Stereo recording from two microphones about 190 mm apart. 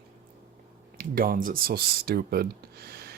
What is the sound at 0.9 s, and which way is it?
Speech, 50° right (ahead or behind).